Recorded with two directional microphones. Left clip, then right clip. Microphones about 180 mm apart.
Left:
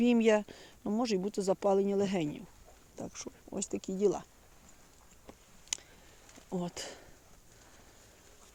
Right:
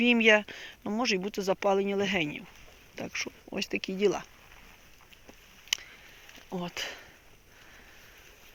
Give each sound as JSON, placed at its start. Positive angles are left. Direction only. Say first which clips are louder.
{"t": 0.0, "sound": "speech", "louder": "right 5 dB", "side_deg": 20}
{"t": 2.9, "sound": "speech", "louder": "right 9 dB", "side_deg": 0}
{"t": 5.7, "sound": "a sound", "louder": "right 9 dB", "side_deg": 25}
{"t": 6.6, "sound": "speech", "louder": "right 6 dB", "side_deg": 25}